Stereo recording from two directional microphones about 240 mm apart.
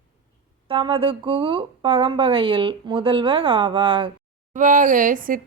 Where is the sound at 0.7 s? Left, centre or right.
Right.